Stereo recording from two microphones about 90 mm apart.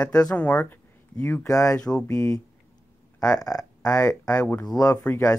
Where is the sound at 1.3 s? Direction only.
40° left (ahead or behind).